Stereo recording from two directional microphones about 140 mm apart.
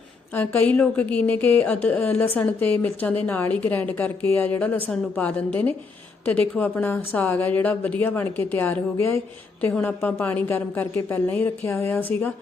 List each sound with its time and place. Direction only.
0.3 s a woman's voice: 10° left (ahead or behind)